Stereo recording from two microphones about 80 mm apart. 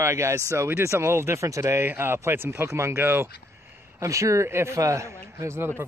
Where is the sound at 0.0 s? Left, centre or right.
Right.